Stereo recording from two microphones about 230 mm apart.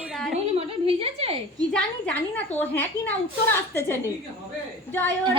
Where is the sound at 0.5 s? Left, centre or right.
Right.